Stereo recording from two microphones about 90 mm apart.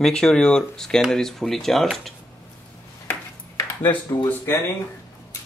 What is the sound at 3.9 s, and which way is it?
Speech, 60° left (ahead or behind).